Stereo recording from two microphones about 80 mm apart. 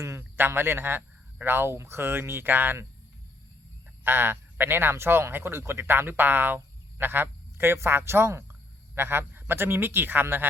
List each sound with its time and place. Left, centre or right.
0.0 s speech: right
4.0 s speech: right